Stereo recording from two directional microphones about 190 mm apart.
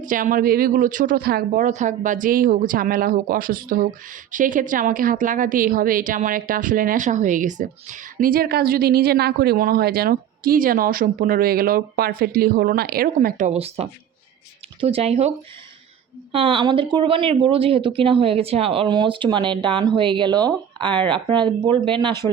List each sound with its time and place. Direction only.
0.0 s speech: 45° right (ahead or behind)
16.3 s speech: 30° right (ahead or behind)